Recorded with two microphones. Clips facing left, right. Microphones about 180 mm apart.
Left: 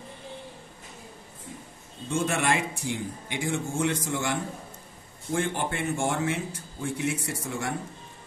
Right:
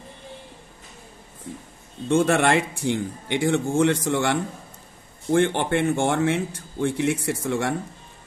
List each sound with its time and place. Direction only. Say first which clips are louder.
2.0 s speech: right 7 dB; 60° right (ahead or behind)